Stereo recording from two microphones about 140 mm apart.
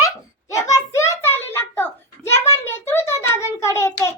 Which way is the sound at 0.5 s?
20° left (ahead or behind).